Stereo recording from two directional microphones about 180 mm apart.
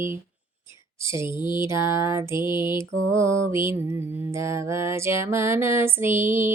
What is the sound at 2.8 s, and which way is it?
Music, 15° right (ahead or behind).